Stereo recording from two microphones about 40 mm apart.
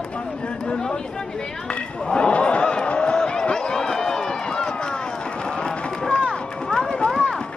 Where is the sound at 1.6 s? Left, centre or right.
Left.